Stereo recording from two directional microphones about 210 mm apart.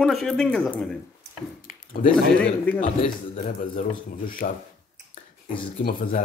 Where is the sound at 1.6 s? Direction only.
40° left (ahead or behind).